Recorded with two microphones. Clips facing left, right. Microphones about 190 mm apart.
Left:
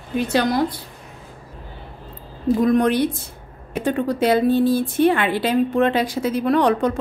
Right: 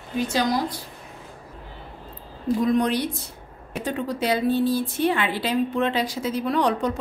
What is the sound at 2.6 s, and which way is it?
A woman's voice, 55° left (ahead or behind).